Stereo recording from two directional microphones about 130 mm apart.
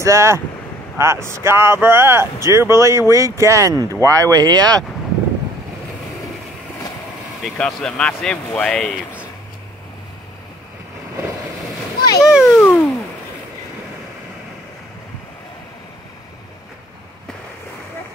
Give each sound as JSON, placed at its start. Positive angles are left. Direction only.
{"t": 0.0, "sound": "speech", "side_deg": -20}
{"t": 7.4, "sound": "speech", "side_deg": 5}
{"t": 12.3, "sound": "speech", "side_deg": -5}
{"t": 12.5, "sound": "a sound", "side_deg": 10}